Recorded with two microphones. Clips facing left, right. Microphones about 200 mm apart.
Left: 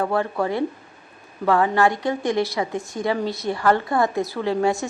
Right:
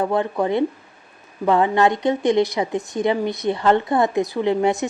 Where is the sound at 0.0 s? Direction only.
20° right (ahead or behind).